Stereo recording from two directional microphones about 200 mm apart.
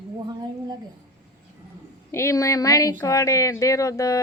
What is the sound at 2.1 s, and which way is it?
Speech, 15° left (ahead or behind).